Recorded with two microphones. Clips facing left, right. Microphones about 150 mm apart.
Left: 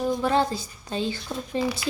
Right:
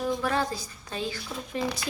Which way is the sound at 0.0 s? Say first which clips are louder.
Left 4 dB; 25° left (ahead or behind).